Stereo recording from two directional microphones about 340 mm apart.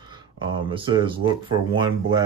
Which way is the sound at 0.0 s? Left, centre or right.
Centre.